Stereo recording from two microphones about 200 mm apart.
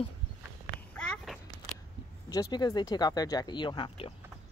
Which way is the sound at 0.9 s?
Centre (ahead or behind).